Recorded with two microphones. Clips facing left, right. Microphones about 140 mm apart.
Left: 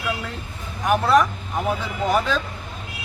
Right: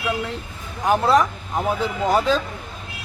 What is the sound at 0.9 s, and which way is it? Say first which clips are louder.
Speech: even; 30° right (ahead or behind).